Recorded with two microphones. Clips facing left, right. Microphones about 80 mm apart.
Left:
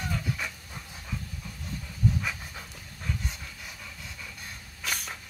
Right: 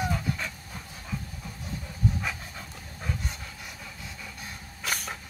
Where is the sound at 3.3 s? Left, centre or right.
Centre.